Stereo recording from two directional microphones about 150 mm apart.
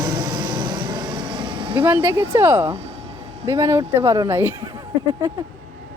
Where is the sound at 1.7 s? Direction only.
15° right (ahead or behind).